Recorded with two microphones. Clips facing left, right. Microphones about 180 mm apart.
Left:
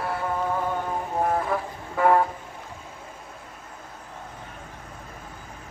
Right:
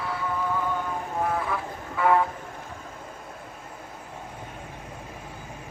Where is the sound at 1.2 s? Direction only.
40° left (ahead or behind).